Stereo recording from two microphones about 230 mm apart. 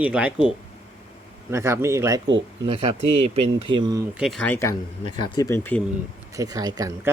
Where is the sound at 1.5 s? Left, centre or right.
Centre.